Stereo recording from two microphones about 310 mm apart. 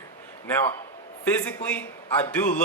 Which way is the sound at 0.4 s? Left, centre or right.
Centre.